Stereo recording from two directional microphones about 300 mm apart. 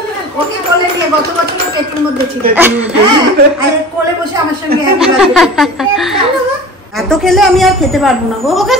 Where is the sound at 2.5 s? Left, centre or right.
Centre.